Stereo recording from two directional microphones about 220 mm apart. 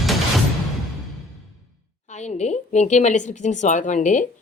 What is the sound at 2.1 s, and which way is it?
A woman's voice, 30° left (ahead or behind).